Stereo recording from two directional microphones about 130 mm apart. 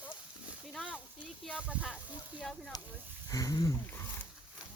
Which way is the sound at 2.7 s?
30° left (ahead or behind).